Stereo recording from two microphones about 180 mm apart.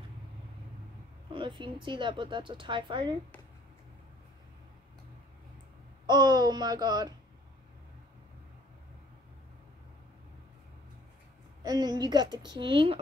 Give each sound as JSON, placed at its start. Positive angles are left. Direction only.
{"t": 1.3, "sound": "speech", "side_deg": -30}
{"t": 6.0, "sound": "speech", "side_deg": -25}
{"t": 11.6, "sound": "speech", "side_deg": -20}